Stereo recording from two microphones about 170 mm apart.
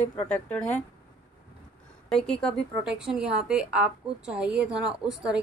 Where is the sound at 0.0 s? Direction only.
10° left (ahead or behind).